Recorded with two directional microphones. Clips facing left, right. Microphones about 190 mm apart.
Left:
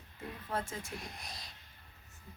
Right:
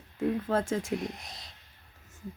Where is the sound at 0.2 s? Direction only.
90° right.